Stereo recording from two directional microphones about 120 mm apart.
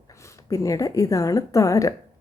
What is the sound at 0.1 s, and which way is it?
Speech, 25° left (ahead or behind).